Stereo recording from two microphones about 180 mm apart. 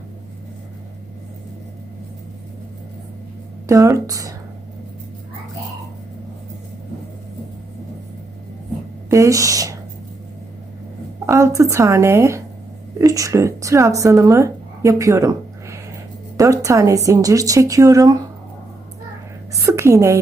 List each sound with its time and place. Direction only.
3.7 s speech: 20° right (ahead or behind)
9.0 s speech: 15° right (ahead or behind)
11.3 s a woman's voice: 15° right (ahead or behind)
19.5 s a sound: 15° right (ahead or behind)